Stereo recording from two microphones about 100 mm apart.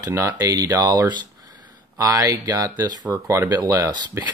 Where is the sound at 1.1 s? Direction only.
45° right (ahead or behind).